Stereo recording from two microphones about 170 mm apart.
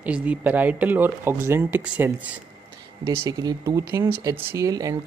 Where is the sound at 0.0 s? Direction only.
10° right (ahead or behind).